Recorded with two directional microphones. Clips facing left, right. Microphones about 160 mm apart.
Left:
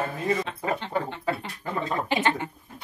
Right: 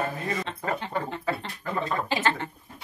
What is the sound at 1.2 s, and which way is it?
Speech, 20° left (ahead or behind).